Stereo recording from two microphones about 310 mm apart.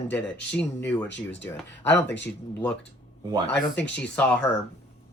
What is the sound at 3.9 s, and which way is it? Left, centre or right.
Speech, centre.